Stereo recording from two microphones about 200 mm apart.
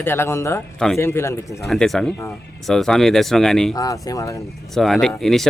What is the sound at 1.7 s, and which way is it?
Speech, centre (ahead or behind).